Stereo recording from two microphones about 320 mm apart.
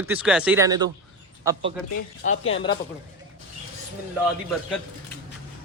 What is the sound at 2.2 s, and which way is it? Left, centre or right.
Speech, left.